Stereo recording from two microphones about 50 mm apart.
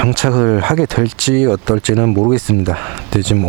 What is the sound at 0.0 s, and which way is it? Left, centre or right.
Speech, centre.